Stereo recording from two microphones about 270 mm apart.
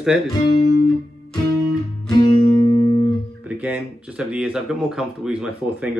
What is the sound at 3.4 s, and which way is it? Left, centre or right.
Speech, centre.